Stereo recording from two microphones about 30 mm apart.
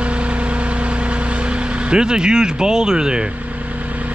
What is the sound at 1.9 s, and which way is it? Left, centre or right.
Speech, right.